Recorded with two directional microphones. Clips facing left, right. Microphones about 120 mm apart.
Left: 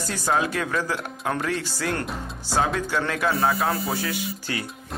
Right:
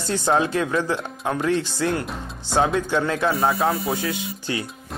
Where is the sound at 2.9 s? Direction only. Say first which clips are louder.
Right 3 dB; 25° right (ahead or behind).